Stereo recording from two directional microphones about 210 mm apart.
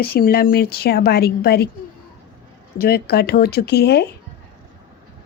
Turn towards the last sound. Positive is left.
turn(degrees=50)  # may be behind; listen again after turning